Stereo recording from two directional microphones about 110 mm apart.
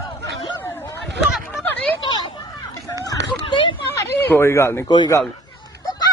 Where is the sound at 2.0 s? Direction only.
45° left (ahead or behind).